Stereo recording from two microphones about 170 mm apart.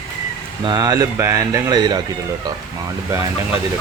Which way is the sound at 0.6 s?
20° right (ahead or behind).